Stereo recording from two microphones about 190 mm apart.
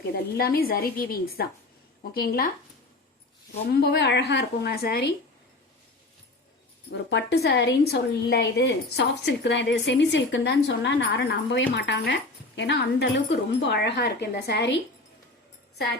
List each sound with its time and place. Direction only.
0.1 s speech: 50° left (ahead or behind)
3.7 s speech: 60° left (ahead or behind)
6.9 s a woman's voice: 65° left (ahead or behind)